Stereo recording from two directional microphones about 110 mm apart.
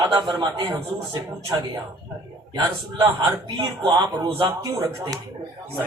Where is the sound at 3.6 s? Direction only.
40° right (ahead or behind).